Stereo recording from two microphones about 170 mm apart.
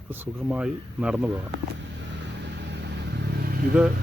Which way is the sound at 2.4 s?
85° right.